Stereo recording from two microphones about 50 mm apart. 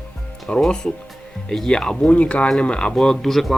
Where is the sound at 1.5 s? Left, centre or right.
Centre.